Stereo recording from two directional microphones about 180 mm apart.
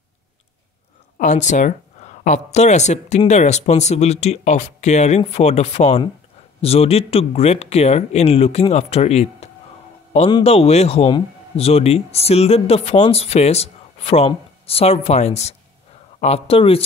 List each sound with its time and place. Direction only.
1.1 s a man's voice: 45° left (ahead or behind)